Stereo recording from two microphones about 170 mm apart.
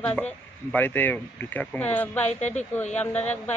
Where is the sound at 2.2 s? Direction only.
45° left (ahead or behind).